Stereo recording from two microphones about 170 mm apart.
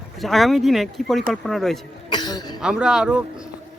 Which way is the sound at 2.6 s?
5° right (ahead or behind).